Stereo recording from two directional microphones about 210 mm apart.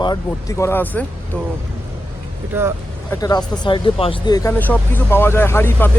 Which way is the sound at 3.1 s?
15° left (ahead or behind).